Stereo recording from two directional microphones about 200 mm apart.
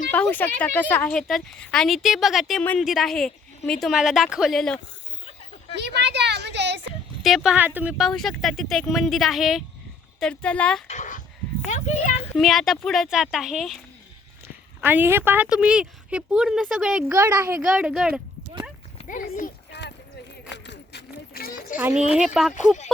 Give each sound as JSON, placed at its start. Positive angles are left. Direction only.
{"t": 0.1, "sound": "a woman's voice", "side_deg": 10}
{"t": 5.7, "sound": "a woman's voice", "side_deg": -55}
{"t": 7.2, "sound": "a woman's voice", "side_deg": 0}
{"t": 10.8, "sound": "speech", "side_deg": 40}
{"t": 12.3, "sound": "a woman's voice", "side_deg": 0}
{"t": 14.4, "sound": "speech", "side_deg": -10}
{"t": 17.7, "sound": "a woman's voice", "side_deg": -5}
{"t": 18.9, "sound": "speech", "side_deg": 40}
{"t": 19.7, "sound": "clip-clop", "side_deg": 60}
{"t": 20.5, "sound": "a sound", "side_deg": 55}
{"t": 21.8, "sound": "a woman's voice", "side_deg": -5}